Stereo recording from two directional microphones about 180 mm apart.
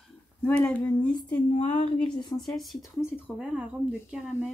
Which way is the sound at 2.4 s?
Centre (ahead or behind).